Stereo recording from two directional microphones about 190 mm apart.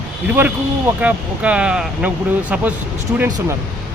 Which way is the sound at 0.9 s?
10° right (ahead or behind).